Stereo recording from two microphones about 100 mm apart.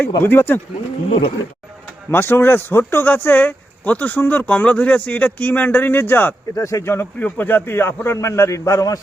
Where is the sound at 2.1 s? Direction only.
20° left (ahead or behind).